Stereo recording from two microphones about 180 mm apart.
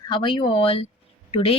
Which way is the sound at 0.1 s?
25° left (ahead or behind).